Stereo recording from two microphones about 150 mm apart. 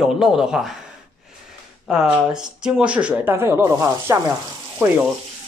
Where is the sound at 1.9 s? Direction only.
5° right (ahead or behind); by 5.0 s 20° right (ahead or behind).